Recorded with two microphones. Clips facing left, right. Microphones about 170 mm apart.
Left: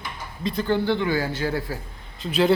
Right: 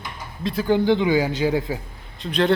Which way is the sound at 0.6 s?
15° right (ahead or behind).